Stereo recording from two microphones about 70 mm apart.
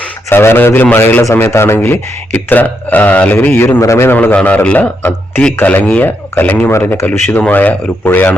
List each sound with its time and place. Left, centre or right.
0.3 s a man's voice: left
1.2 s a man's voice: left
1.8 s speech: left
3.8 s a man's voice: left
4.4 s speech: centre
6.7 s speech: left